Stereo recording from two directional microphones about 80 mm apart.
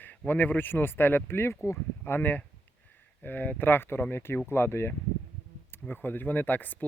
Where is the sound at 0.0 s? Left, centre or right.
Left.